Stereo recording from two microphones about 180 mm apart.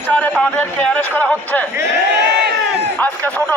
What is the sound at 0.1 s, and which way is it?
Speech, 10° left (ahead or behind).